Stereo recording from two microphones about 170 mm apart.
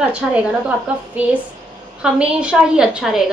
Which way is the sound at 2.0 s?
5° right (ahead or behind).